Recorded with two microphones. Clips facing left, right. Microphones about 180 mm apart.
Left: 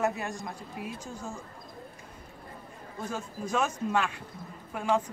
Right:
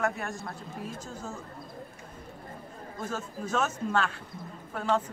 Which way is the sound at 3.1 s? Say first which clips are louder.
Even; 10° left (ahead or behind).